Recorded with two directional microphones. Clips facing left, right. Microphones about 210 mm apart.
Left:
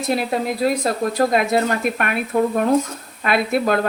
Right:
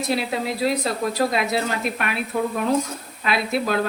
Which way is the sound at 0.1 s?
50° left (ahead or behind).